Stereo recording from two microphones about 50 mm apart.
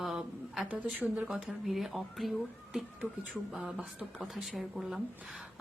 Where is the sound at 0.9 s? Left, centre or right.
Right.